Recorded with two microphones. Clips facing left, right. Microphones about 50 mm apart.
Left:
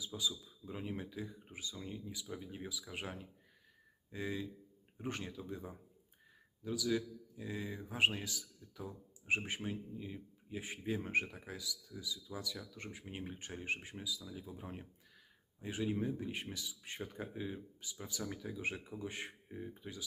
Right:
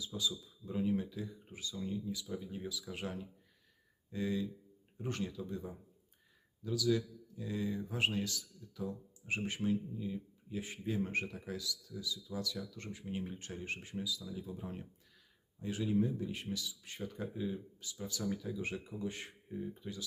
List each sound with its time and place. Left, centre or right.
0.0 s speech: centre